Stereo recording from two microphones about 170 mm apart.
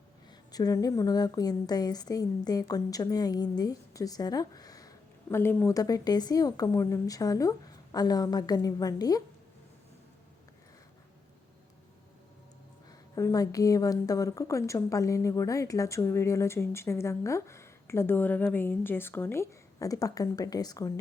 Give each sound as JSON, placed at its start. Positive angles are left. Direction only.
{"t": 0.5, "sound": "a woman's voice", "side_deg": 20}
{"t": 13.1, "sound": "a woman's voice", "side_deg": 20}